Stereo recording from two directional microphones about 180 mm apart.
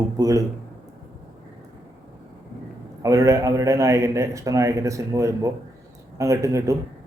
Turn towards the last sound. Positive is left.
turn(degrees=-15)  # may be behind; listen again after turning